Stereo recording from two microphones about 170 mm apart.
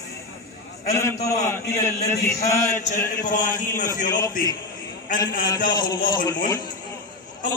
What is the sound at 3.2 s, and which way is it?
A man's voice, 50° left (ahead or behind).